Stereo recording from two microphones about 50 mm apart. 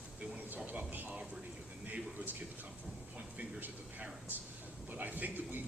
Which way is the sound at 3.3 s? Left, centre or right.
Right.